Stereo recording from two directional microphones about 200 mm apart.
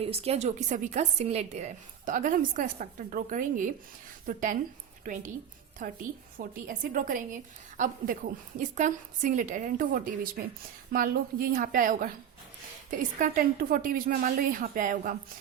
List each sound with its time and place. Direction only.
0.0 s a woman's voice: 30° right (ahead or behind)
5.8 s a woman's voice: 40° right (ahead or behind)